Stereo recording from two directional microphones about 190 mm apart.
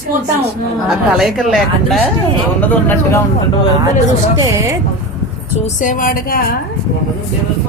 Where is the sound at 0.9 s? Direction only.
Centre (ahead or behind).